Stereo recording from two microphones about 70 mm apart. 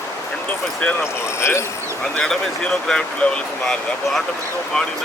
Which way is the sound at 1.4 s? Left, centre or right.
Left.